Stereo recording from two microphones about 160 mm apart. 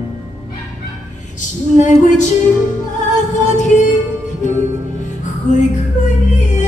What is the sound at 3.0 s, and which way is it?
Music, 50° left (ahead or behind).